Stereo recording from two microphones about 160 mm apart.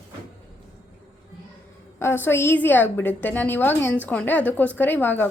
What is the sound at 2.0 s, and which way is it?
Speech, 15° left (ahead or behind).